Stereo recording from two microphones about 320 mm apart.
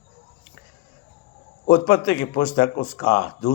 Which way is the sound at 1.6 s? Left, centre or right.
Left.